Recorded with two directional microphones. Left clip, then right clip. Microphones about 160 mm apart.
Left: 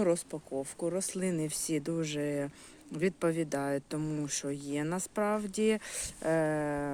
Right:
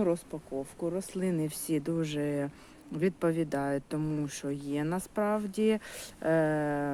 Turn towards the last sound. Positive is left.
turn(degrees=15)  # may be behind; listen again after turning